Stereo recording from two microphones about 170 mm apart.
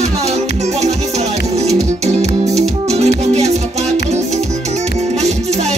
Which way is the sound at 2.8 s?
40° right (ahead or behind).